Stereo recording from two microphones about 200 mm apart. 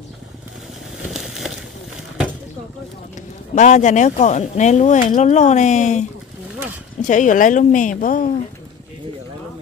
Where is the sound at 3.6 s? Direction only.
35° left (ahead or behind).